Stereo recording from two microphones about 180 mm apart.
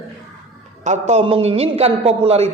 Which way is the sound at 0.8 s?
40° right (ahead or behind).